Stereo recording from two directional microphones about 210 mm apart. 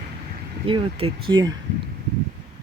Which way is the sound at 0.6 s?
25° right (ahead or behind).